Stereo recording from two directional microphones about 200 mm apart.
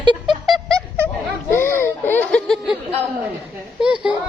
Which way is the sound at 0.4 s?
Centre (ahead or behind).